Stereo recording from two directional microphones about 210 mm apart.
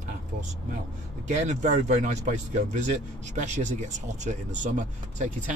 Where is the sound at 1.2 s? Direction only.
35° right (ahead or behind).